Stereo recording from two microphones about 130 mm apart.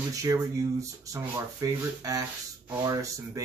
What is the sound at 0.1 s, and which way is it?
Speech, 25° right (ahead or behind).